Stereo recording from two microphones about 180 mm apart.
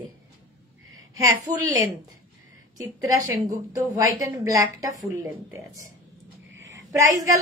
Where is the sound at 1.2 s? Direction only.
15° right (ahead or behind).